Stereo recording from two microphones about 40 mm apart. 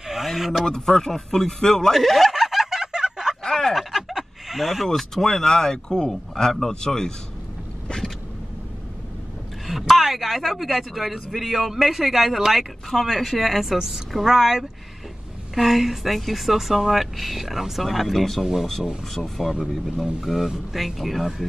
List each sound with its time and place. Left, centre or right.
0.0 s a sound: centre
0.7 s speech: centre
2.0 s speech: centre
2.3 s a sound: centre
3.4 s a sound: centre
3.7 s fowl: centre
4.9 s speech: centre
9.7 s speech: centre
18.4 s speech: centre
19.1 s speech: centre
20.2 s speech: centre